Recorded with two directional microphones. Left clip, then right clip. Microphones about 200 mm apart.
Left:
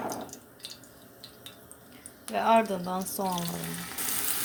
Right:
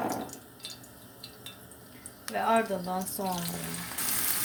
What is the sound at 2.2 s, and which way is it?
Speech, 35° left (ahead or behind).